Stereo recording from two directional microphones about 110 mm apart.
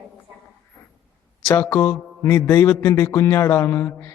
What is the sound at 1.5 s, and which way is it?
Speech, 30° left (ahead or behind).